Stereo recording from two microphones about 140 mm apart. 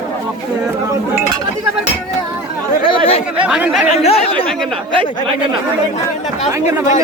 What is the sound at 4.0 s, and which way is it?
Speech, 45° left (ahead or behind).